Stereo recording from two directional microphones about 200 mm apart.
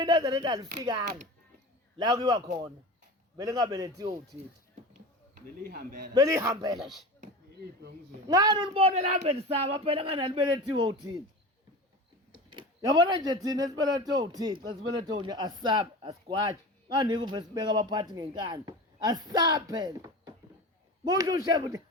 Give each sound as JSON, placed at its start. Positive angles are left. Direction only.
{"t": 0.0, "sound": "speech", "side_deg": -20}
{"t": 5.6, "sound": "a man's voice", "side_deg": -50}
{"t": 6.1, "sound": "speech", "side_deg": -15}
{"t": 6.7, "sound": "speech", "side_deg": 0}
{"t": 8.3, "sound": "speech", "side_deg": -20}
{"t": 12.3, "sound": "speech", "side_deg": -25}